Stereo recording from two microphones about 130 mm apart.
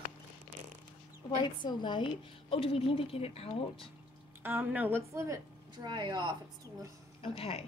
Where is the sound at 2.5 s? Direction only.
45° left (ahead or behind).